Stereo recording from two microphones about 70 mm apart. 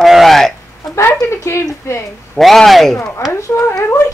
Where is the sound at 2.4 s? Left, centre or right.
Centre.